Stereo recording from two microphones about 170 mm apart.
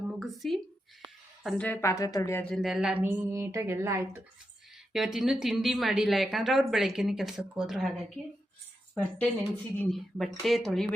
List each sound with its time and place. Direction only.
0.1 s a sound: centre (ahead or behind)
1.5 s a woman's voice: 10° left (ahead or behind)
2.4 s a woman's voice: centre (ahead or behind); by 4.2 s 15° right (ahead or behind)
4.9 s a woman's voice: centre (ahead or behind)
9.7 s a woman's voice: centre (ahead or behind)